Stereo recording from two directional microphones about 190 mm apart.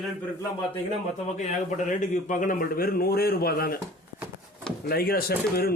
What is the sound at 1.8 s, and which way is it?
A man's voice, 40° left (ahead or behind).